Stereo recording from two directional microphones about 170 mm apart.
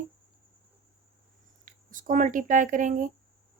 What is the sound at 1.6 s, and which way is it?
Speech, 50° right (ahead or behind).